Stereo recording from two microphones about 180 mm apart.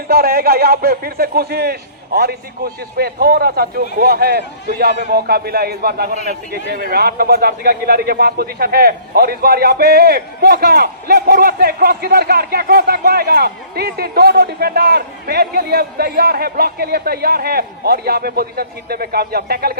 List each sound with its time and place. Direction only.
0.1 s a man's voice: 60° right (ahead or behind)